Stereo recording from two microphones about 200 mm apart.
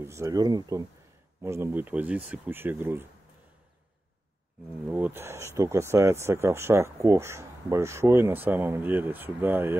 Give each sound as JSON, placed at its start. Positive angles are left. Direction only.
{"t": 0.0, "sound": "speech", "side_deg": -15}
{"t": 4.8, "sound": "speech", "side_deg": -10}